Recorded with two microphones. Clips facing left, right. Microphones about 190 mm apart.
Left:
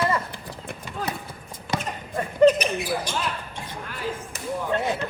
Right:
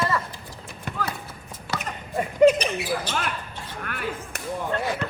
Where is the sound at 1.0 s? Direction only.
25° left (ahead or behind).